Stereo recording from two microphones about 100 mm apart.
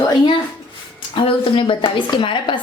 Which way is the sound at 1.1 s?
55° left (ahead or behind).